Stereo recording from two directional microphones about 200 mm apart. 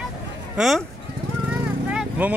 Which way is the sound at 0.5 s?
Centre (ahead or behind).